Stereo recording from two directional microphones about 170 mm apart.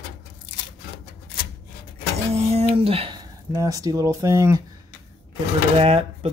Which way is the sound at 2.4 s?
35° right (ahead or behind).